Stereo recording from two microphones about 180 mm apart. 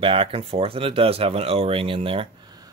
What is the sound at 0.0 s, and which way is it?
Speech, 30° right (ahead or behind).